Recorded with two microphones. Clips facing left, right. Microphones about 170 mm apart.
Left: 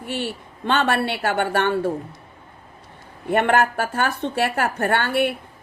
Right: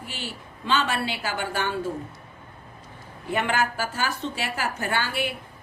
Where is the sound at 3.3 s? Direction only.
60° left (ahead or behind).